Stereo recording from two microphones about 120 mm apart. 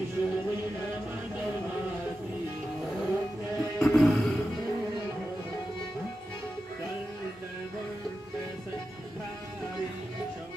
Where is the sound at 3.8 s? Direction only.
Centre (ahead or behind).